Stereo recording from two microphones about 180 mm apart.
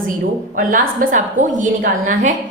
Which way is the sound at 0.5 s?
45° right (ahead or behind).